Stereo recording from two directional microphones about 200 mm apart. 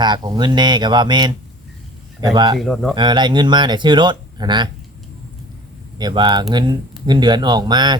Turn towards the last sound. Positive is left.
turn(degrees=-20)  # may be behind; listen again after turning